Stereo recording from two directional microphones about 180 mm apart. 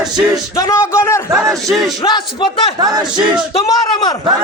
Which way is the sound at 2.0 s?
25° left (ahead or behind).